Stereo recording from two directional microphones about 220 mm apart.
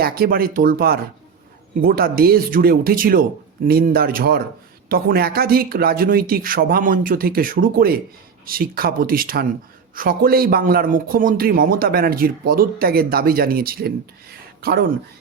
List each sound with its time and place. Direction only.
0.0 s a man's voice: 45° right (ahead or behind)